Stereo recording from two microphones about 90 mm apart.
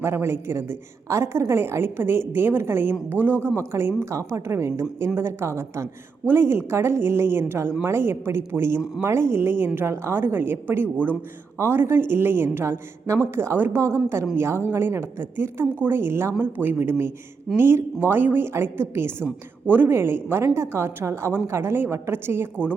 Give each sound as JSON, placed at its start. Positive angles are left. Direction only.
{"t": 0.0, "sound": "a woman's voice", "side_deg": -30}